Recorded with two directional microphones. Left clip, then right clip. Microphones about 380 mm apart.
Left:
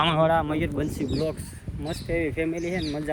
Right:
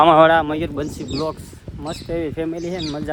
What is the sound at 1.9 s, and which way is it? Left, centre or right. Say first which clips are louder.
Speech: right 3 dB; centre.